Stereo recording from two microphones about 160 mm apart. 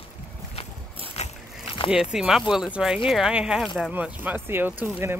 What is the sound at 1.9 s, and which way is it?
Speech, 5° right (ahead or behind).